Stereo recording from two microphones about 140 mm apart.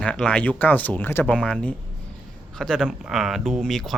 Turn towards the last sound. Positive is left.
turn(degrees=0)  # may be behind; listen again after turning